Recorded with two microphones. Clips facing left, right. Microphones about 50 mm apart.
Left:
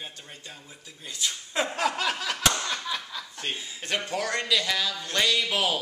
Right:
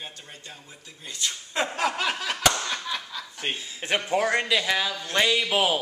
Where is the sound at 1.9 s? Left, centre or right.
Centre.